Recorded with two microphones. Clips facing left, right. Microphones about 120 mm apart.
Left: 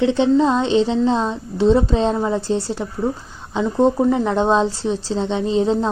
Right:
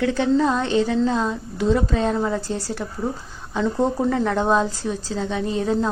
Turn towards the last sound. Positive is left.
turn(degrees=25)  # may be behind; listen again after turning